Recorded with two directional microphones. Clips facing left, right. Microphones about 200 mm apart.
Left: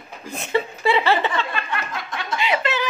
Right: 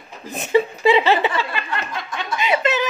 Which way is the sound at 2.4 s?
20° right (ahead or behind).